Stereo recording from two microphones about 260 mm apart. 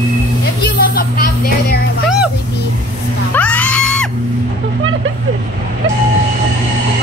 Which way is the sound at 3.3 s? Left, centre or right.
Centre.